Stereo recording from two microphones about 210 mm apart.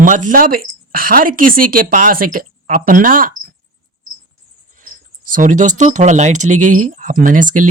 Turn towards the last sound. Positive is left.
turn(degrees=-40)  # may be behind; listen again after turning